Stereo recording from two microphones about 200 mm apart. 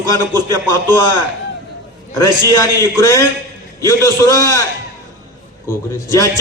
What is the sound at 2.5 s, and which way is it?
A man's voice, 15° left (ahead or behind).